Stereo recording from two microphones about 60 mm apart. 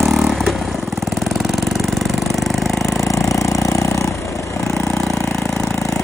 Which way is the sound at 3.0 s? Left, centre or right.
Left.